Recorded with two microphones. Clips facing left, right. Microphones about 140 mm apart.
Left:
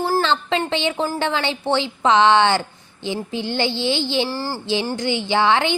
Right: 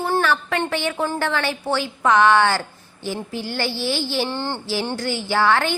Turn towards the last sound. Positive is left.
turn(degrees=20)  # may be behind; listen again after turning